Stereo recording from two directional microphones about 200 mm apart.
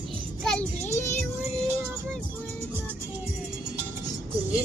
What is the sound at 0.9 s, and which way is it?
Music, 10° left (ahead or behind).